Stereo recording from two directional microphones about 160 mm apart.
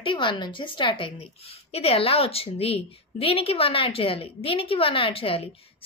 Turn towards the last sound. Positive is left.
turn(degrees=35)  # may be behind; listen again after turning